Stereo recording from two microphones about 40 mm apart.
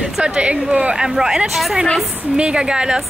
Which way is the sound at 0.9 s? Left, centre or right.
Centre.